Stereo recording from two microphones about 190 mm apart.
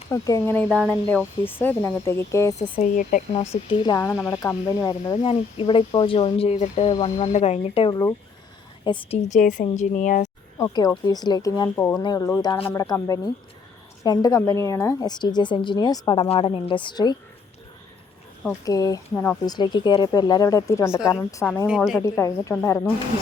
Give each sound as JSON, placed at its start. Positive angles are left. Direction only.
{"t": 0.1, "sound": "speech", "side_deg": 15}
{"t": 0.7, "sound": "speech", "side_deg": 0}
{"t": 1.5, "sound": "speech", "side_deg": 10}
{"t": 2.6, "sound": "speech", "side_deg": 40}
{"t": 10.6, "sound": "speech", "side_deg": 20}
{"t": 18.6, "sound": "speech", "side_deg": 20}
{"t": 19.5, "sound": "speech", "side_deg": 20}